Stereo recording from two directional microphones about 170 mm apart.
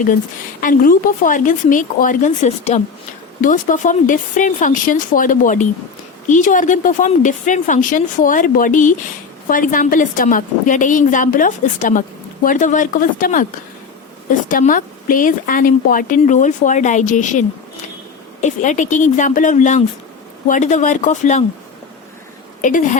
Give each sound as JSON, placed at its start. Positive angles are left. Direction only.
{"t": 0.6, "sound": "a woman's voice", "side_deg": 55}
{"t": 18.4, "sound": "a woman's voice", "side_deg": 45}
{"t": 22.6, "sound": "a woman's voice", "side_deg": 45}